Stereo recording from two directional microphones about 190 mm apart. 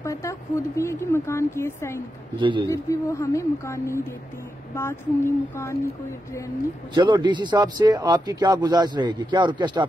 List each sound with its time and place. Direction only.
0.0 s speech: 15° left (ahead or behind)
2.4 s speech: 25° right (ahead or behind)
2.7 s speech: 15° left (ahead or behind)
6.9 s speech: 25° right (ahead or behind)